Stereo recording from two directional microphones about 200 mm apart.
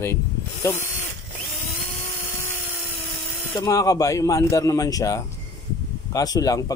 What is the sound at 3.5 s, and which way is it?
Speech, 15° left (ahead or behind).